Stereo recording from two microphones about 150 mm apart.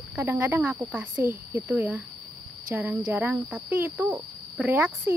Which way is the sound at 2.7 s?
10° right (ahead or behind).